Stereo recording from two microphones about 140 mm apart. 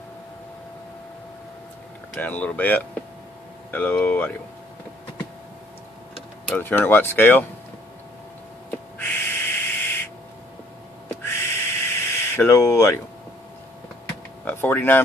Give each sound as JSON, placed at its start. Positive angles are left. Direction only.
{"t": 2.1, "sound": "speech", "side_deg": 10}
{"t": 6.5, "sound": "speech", "side_deg": 15}
{"t": 8.6, "sound": "owl", "side_deg": 10}
{"t": 11.2, "sound": "a sound", "side_deg": 15}
{"t": 14.4, "sound": "door", "side_deg": 15}